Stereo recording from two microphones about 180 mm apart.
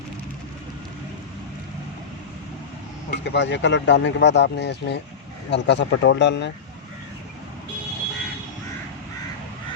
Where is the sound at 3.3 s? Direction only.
80° left.